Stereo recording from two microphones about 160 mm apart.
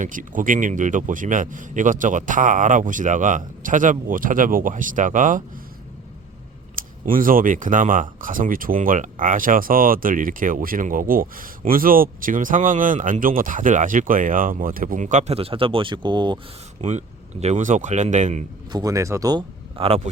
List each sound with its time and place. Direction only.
0.0 s speech: 55° right (ahead or behind)
6.7 s speech: 60° right (ahead or behind); by 16.4 s 30° right (ahead or behind)
16.8 s speech: 45° right (ahead or behind)
18.7 s speech: 25° right (ahead or behind)